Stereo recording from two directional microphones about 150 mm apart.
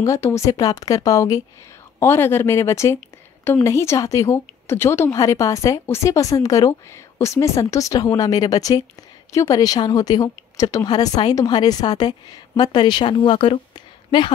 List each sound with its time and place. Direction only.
0.0 s a woman's voice: 20° left (ahead or behind)